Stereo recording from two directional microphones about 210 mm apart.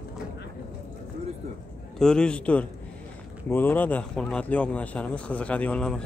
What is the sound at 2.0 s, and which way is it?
Speech, 5° left (ahead or behind).